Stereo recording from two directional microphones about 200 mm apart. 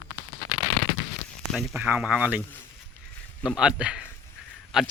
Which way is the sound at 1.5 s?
5° right (ahead or behind).